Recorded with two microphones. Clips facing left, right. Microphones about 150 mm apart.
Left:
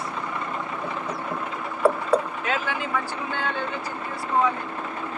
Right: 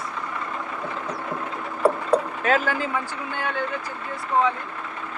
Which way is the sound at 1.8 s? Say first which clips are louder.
Even; 15° right (ahead or behind).